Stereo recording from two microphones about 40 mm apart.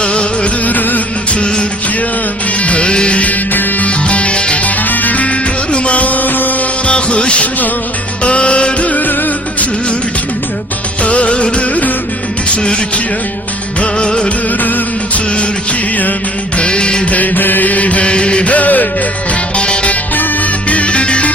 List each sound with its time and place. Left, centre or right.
0.0 s music: left
0.6 s music: left
1.3 s music: left
3.5 s music: left
3.8 s music: left
4.6 s music: left
6.8 s music: left
11.0 s music: left
13.8 s music: left
14.6 s music: left
16.6 s music: left
17.1 s music: left
18.5 s music: left
19.5 s music: left